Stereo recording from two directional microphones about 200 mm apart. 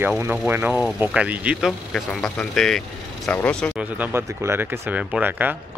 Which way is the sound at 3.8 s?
10° right (ahead or behind).